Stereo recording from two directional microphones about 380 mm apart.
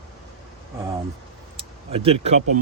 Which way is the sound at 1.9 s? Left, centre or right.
Centre.